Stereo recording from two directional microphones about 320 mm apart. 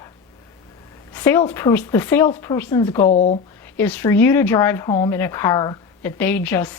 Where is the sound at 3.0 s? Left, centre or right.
Left.